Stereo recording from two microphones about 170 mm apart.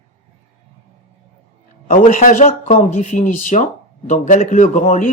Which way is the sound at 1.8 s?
50° left (ahead or behind).